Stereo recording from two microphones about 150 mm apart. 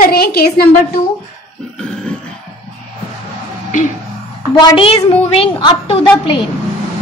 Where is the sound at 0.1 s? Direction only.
90° left.